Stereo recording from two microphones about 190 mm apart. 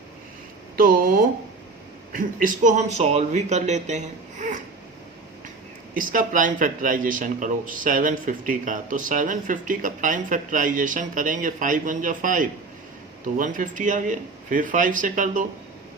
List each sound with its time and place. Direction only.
0.8 s a man's voice: 50° right (ahead or behind)
5.9 s a man's voice: 45° right (ahead or behind)